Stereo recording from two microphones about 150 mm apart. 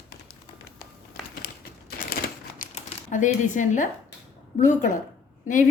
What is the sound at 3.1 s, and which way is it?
A woman's voice, 55° left (ahead or behind).